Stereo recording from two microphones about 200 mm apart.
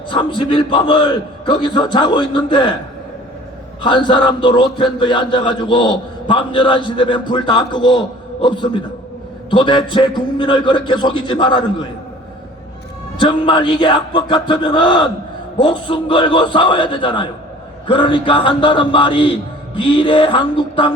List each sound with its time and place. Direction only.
0.1 s a man's voice: 25° left (ahead or behind)
3.8 s a man's voice: 25° left (ahead or behind)
13.1 s a man's voice: 25° left (ahead or behind)